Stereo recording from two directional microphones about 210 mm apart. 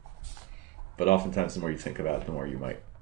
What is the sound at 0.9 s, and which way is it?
Speech, 35° left (ahead or behind).